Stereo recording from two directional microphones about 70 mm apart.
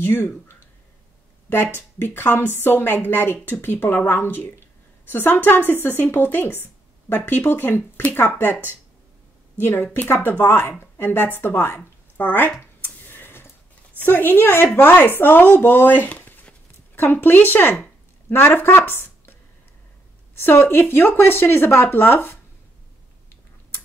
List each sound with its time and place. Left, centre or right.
0.0 s speech: left
1.5 s speech: left
9.6 s speech: left
12.8 s a sound: left
13.9 s a woman's voice: left
20.3 s speech: left